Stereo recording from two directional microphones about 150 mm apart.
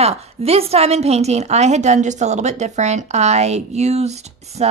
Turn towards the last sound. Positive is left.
turn(degrees=-45)  # may be behind; listen again after turning